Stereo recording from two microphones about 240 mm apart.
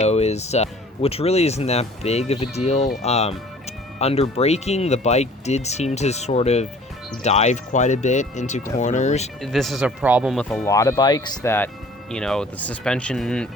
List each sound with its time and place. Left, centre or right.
0.0 s speech: left
9.4 s speech: centre
10.7 s speech: centre